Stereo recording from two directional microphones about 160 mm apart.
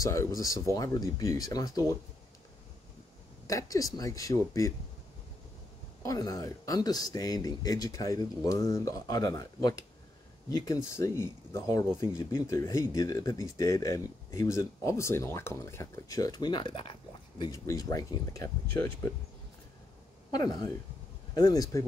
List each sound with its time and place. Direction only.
0.0 s speech: 20° left (ahead or behind)
3.4 s speech: 20° left (ahead or behind)
6.0 s speech: 20° left (ahead or behind)
20.2 s speech: 25° left (ahead or behind)